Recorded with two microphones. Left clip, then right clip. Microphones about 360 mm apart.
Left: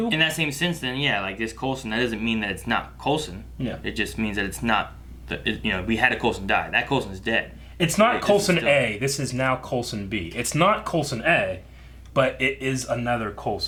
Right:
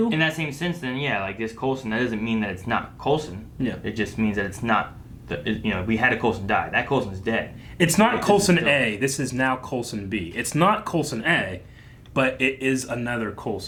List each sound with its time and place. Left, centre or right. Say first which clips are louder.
0.1 s speech: left 1 dB; right
7.8 s speech: even; left